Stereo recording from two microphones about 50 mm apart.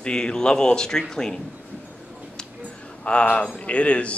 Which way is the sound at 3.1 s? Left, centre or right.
Left.